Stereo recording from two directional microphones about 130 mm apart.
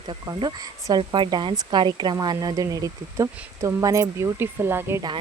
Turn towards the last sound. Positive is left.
turn(degrees=-15)  # may be behind; listen again after turning